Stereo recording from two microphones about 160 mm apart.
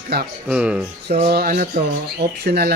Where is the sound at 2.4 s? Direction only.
90° right.